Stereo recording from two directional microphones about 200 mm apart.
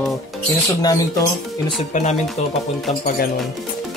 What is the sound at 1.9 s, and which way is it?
Speech, 35° left (ahead or behind).